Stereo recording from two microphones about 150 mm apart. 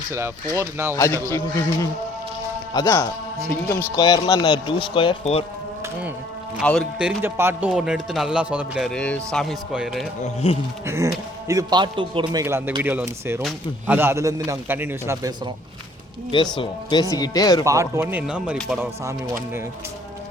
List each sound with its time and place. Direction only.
0.1 s a man's voice: 20° right (ahead or behind)
1.3 s speech: 20° left (ahead or behind); by 5.5 s 40° left (ahead or behind)
5.8 s speech: 10° right (ahead or behind)
6.6 s speech: centre (ahead or behind)
7.2 s speech: 15° right (ahead or behind)
7.7 s speech: centre (ahead or behind)
10.2 s speech: 40° left (ahead or behind)
10.8 s a man's voice: 20° right (ahead or behind)
12.4 s speech: 15° right (ahead or behind)
16.6 s speech: 25° left (ahead or behind)
17.7 s speech: 20° right (ahead or behind)
18.8 s a man's voice: 20° right (ahead or behind)